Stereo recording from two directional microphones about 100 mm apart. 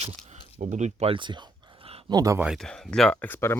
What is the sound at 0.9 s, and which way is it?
Speech, 80° right.